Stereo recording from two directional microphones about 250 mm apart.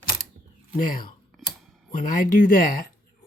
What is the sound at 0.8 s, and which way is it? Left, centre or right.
Speech, left.